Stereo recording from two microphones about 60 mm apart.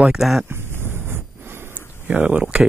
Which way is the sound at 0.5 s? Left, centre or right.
Right.